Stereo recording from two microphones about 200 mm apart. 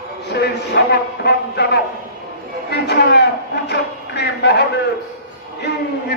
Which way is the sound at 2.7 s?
55° left (ahead or behind).